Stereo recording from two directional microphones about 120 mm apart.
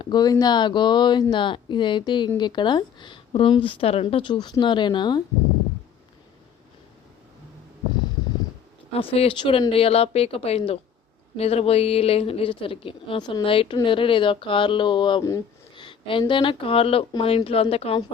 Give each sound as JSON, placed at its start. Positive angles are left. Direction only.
{"t": 0.0, "sound": "speech", "side_deg": 35}
{"t": 8.9, "sound": "speech", "side_deg": 55}